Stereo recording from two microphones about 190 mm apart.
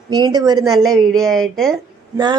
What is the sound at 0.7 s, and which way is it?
Speech, centre (ahead or behind).